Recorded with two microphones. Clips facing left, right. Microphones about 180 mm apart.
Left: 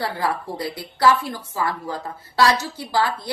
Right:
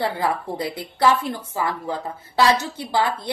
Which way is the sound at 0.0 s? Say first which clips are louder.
Right 2 dB; 20° right (ahead or behind).